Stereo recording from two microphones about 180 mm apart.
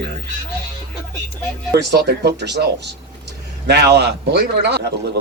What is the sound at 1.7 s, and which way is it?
A man's voice, 65° right (ahead or behind).